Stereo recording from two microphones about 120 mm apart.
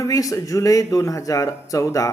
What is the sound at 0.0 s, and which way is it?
A man's voice, 30° left (ahead or behind).